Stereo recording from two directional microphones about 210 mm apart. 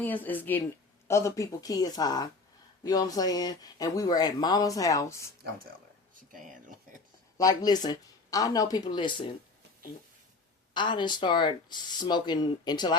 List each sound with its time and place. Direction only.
0.0 s speech: 10° left (ahead or behind)
7.3 s speech: 20° left (ahead or behind)
10.8 s speech: 20° left (ahead or behind)